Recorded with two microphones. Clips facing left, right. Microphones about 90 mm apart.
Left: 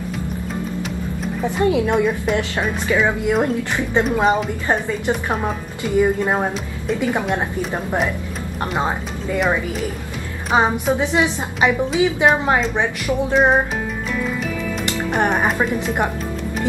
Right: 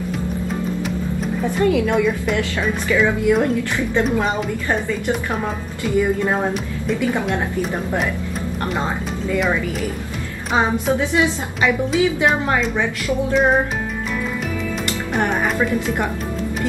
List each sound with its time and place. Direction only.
1.6 s a woman's voice: 20° left (ahead or behind)
3.3 s a woman's voice: 20° left (ahead or behind)
8.7 s a woman's voice: 20° left (ahead or behind)
10.5 s a woman's voice: 20° left (ahead or behind)
15.1 s a woman's voice: 20° left (ahead or behind)